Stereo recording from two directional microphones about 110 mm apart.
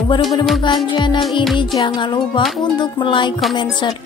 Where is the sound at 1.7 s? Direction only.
45° left (ahead or behind).